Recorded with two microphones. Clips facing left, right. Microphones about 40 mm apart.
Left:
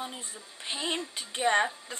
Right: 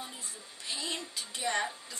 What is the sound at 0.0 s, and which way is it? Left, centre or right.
Speech, left.